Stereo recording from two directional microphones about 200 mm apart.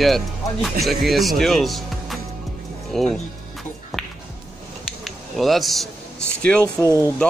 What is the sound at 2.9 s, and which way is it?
Music, centre (ahead or behind).